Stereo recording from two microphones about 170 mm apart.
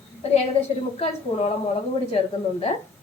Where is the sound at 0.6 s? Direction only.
35° left (ahead or behind).